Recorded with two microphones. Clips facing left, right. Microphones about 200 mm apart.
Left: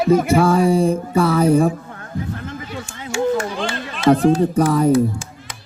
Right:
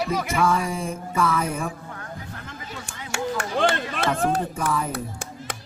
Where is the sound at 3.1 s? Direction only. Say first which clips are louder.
Left 8 dB; 65° right (ahead or behind).